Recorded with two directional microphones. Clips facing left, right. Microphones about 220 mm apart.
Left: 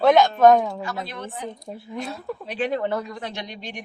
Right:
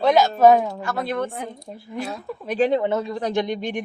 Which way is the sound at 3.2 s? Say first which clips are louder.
Right 10 dB; 50° right (ahead or behind).